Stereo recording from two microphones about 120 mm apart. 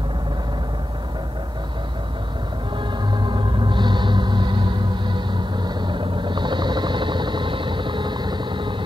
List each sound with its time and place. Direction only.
3.1 s gong: 40° right (ahead or behind)